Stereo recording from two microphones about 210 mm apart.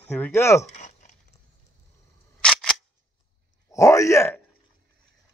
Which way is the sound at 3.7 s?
15° left (ahead or behind).